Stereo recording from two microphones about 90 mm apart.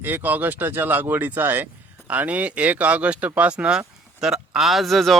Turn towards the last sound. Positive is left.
turn(degrees=0)  # may be behind; listen again after turning